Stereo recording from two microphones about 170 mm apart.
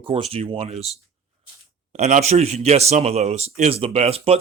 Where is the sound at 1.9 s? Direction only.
45° right (ahead or behind).